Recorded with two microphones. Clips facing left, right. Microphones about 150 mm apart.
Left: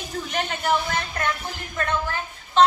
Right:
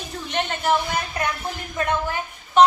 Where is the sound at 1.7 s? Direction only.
15° right (ahead or behind).